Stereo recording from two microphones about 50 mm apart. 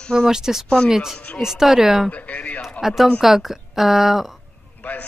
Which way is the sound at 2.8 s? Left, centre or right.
Centre.